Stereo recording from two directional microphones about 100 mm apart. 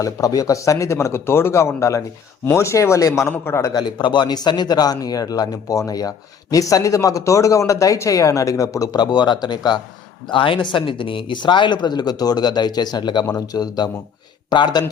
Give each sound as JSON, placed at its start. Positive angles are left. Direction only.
{"t": 0.0, "sound": "speech", "side_deg": 35}
{"t": 3.8, "sound": "speech", "side_deg": 45}
{"t": 10.2, "sound": "speech", "side_deg": 60}